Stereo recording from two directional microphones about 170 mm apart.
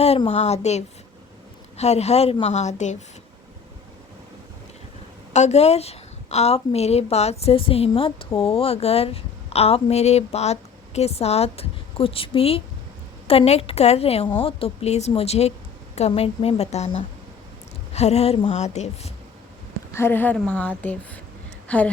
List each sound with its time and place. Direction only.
0.3 s a woman's voice: 40° left (ahead or behind)
5.3 s a woman's voice: 40° left (ahead or behind)
19.9 s a woman's voice: 15° left (ahead or behind)